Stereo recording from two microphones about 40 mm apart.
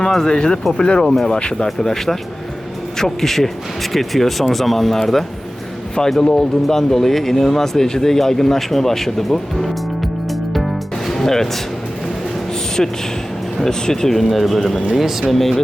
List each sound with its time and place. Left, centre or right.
0.0 s speech: centre
11.1 s music: centre
13.7 s speech: centre
14.2 s speech: centre